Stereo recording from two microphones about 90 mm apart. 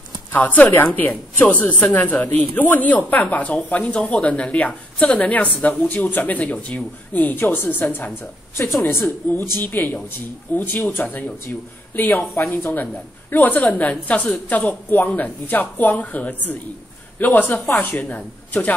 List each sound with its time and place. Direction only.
0.3 s a woman's voice: 20° left (ahead or behind)
13.3 s a woman's voice: 20° left (ahead or behind)